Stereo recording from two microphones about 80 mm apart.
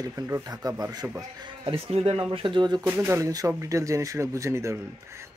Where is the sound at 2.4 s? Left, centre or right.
Right.